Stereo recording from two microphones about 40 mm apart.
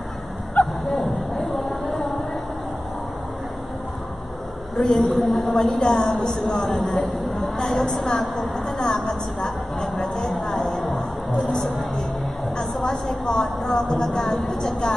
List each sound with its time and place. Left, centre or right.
0.8 s a sound: centre
4.7 s a woman's voice: centre
5.1 s a woman's voice: centre
11.0 s music: centre
12.8 s a woman's voice: centre